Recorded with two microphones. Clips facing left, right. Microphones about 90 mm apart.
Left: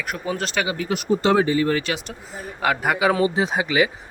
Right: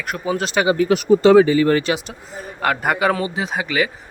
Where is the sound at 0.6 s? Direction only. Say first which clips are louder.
Right 12 dB; 35° right (ahead or behind).